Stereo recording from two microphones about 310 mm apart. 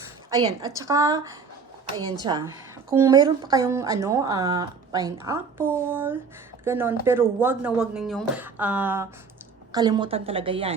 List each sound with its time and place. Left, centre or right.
0.3 s speech: centre